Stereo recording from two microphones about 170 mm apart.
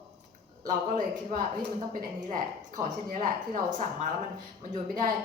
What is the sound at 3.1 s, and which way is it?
A woman's voice, 50° right (ahead or behind).